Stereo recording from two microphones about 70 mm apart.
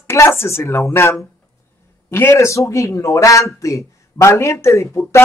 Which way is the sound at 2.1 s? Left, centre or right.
Left.